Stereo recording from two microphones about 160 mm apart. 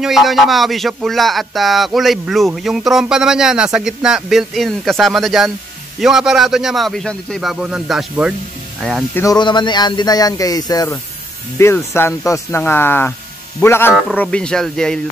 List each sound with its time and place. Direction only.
0.0 s speech: centre (ahead or behind)
9.1 s speech: 20° left (ahead or behind); by 15.0 s 5° left (ahead or behind)